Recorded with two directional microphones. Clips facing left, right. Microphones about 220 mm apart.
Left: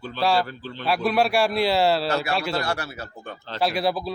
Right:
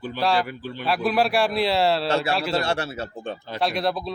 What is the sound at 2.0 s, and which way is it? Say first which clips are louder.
Speech: right 2 dB; 30° right (ahead or behind).